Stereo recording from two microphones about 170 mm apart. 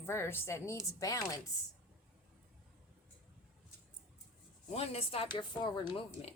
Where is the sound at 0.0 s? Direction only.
15° left (ahead or behind).